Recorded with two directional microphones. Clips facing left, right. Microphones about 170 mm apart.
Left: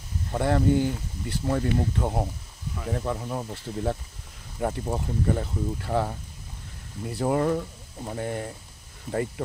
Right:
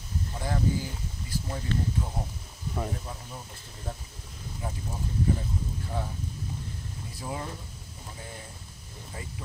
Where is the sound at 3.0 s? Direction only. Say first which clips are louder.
Left 12 dB; 80° left.